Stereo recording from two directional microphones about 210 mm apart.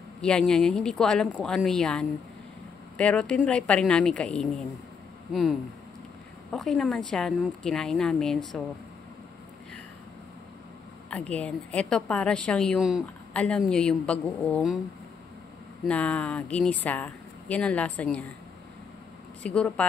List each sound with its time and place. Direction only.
0.2 s a woman's voice: 5° left (ahead or behind)
11.1 s a woman's voice: 5° left (ahead or behind)
15.9 s speech: 5° left (ahead or behind)
19.4 s a woman's voice: 5° left (ahead or behind)